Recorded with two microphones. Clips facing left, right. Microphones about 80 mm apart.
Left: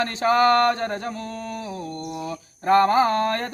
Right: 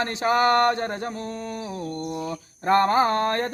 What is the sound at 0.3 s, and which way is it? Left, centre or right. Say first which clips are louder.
Speech: left 2 dB; right.